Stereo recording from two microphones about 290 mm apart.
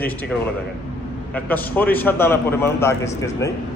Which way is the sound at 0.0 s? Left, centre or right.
Centre.